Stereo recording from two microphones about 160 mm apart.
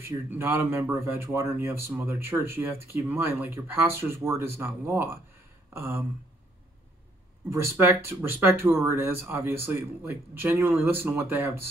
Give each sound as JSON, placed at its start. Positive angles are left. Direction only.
{"t": 0.3, "sound": "speech", "side_deg": -15}
{"t": 7.4, "sound": "speech", "side_deg": -15}